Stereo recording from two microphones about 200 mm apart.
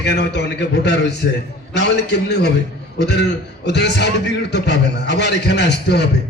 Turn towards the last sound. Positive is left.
turn(degrees=55)  # may be behind; listen again after turning